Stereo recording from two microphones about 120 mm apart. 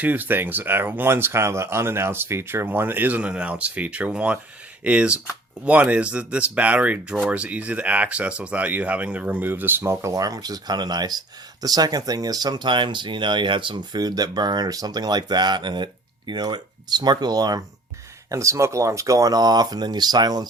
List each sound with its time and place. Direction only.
0.0 s speech: 15° right (ahead or behind); by 20.5 s 35° right (ahead or behind)